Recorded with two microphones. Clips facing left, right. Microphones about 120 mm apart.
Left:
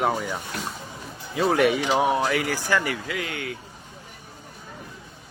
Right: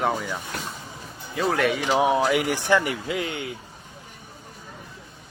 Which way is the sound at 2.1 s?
15° right (ahead or behind).